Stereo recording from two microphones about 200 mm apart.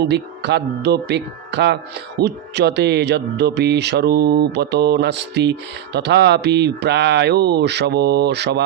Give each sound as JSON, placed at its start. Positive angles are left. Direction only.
{"t": 0.0, "sound": "speech", "side_deg": -55}